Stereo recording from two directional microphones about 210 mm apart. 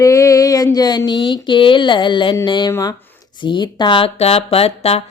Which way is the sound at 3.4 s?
20° left (ahead or behind).